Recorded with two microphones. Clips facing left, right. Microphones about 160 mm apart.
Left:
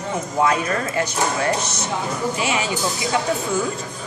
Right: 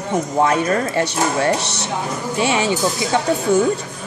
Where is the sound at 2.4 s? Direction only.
30° right (ahead or behind).